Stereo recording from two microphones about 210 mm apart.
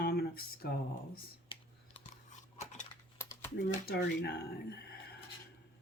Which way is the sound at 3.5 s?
50° left (ahead or behind).